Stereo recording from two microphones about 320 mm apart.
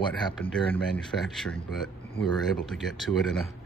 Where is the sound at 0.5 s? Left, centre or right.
Centre.